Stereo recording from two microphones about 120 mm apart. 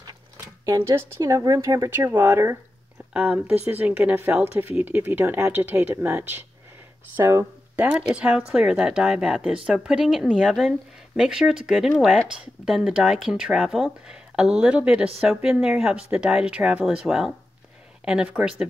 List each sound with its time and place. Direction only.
0.7 s speech: 25° right (ahead or behind)
3.1 s speech: 10° right (ahead or behind)